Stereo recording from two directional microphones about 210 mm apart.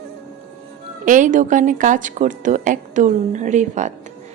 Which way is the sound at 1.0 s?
40° right (ahead or behind).